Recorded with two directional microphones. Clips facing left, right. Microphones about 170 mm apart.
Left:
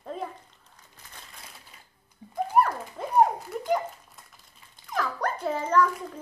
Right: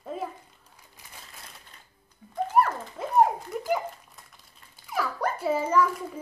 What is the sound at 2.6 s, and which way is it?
Music, centre (ahead or behind).